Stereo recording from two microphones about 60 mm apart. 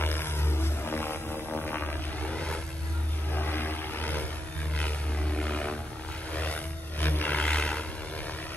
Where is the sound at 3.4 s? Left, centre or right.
Left; by 7.8 s centre.